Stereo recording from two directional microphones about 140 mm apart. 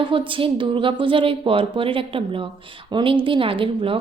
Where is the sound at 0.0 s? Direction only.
40° right (ahead or behind).